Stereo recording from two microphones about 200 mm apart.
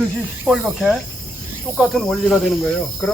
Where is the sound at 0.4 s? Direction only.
5° right (ahead or behind).